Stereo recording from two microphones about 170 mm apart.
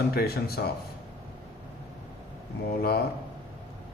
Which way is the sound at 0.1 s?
65° left (ahead or behind).